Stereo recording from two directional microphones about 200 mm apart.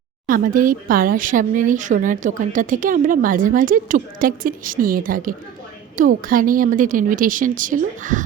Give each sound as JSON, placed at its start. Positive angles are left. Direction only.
{"t": 0.3, "sound": "speech", "side_deg": -45}